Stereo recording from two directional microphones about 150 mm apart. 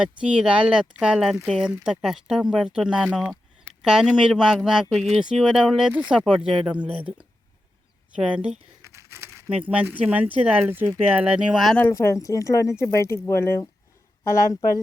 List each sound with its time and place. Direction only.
0.0 s speech: 5° right (ahead or behind)
8.1 s speech: 10° right (ahead or behind)
8.8 s crumpling: 20° right (ahead or behind)
9.6 s speech: 10° right (ahead or behind)
11.8 s speech: 15° left (ahead or behind)